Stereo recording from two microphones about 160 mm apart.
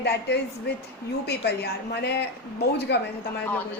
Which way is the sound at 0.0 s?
90° left.